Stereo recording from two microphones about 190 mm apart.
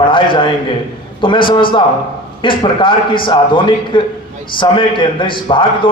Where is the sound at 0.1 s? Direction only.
25° left (ahead or behind).